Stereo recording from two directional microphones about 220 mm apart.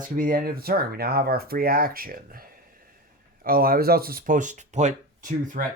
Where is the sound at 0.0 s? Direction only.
40° right (ahead or behind).